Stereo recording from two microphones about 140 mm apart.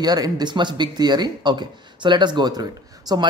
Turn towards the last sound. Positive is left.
turn(degrees=-30)  # may be behind; listen again after turning